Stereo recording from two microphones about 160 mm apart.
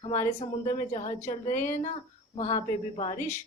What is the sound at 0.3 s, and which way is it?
Speech, 45° left (ahead or behind).